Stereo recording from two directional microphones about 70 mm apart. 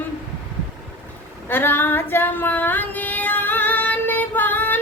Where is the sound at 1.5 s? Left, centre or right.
Left.